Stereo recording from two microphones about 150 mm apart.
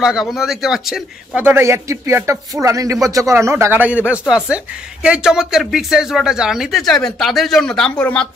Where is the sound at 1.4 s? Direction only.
15° right (ahead or behind).